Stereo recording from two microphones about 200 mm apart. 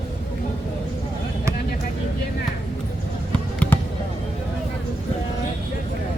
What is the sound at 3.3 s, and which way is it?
Basketball bounce, 5° left (ahead or behind).